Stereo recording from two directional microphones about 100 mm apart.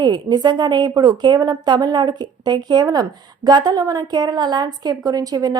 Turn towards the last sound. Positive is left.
turn(degrees=-40)  # may be behind; listen again after turning